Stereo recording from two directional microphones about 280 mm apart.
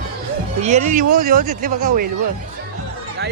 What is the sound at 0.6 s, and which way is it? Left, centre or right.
Speech, right.